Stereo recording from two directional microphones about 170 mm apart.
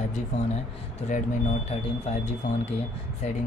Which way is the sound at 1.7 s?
40° left (ahead or behind).